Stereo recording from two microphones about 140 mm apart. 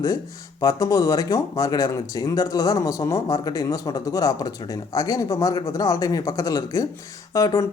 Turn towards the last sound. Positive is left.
turn(degrees=25)  # may be behind; listen again after turning